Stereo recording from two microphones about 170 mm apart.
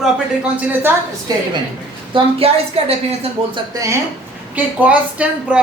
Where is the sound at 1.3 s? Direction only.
25° right (ahead or behind).